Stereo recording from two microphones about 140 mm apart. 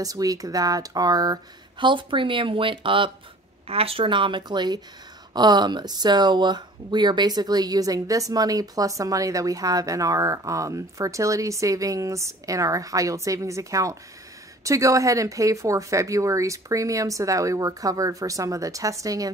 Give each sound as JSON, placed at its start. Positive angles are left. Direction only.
{"t": 0.0, "sound": "speech", "side_deg": -25}